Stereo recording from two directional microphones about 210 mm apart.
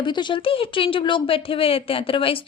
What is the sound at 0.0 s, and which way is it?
Speech, 20° left (ahead or behind).